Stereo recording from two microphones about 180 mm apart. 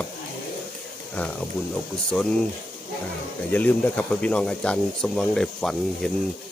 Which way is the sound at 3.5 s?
10° left (ahead or behind).